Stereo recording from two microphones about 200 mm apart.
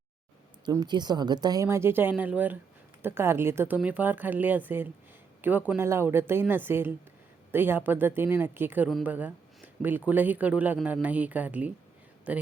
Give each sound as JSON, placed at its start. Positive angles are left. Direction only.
{"t": 0.6, "sound": "speech", "side_deg": -20}